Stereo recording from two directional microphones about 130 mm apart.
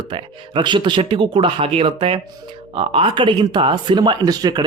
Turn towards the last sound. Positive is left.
turn(degrees=-35)  # may be behind; listen again after turning